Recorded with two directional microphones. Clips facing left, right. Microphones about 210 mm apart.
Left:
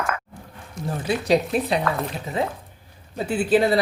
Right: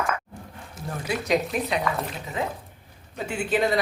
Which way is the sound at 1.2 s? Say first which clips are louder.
Left 4 dB; 30° left (ahead or behind).